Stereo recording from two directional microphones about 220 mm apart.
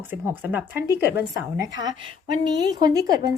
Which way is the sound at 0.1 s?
10° right (ahead or behind).